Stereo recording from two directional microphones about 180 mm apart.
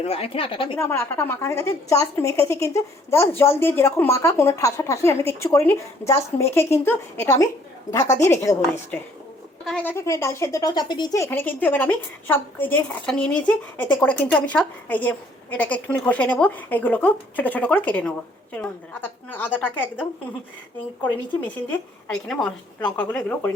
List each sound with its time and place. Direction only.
0.0 s a woman's voice: 35° left (ahead or behind)
0.8 s a woman's voice: 15° left (ahead or behind)
9.6 s a woman's voice: 10° left (ahead or behind)
21.4 s a woman's voice: 10° left (ahead or behind)